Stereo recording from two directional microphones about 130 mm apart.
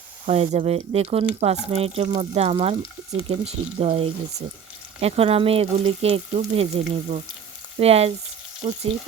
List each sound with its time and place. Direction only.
0.3 s frying: 55° right (ahead or behind)